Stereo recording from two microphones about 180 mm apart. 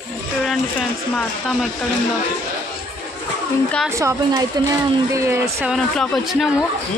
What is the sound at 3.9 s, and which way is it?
A woman's voice, 15° right (ahead or behind).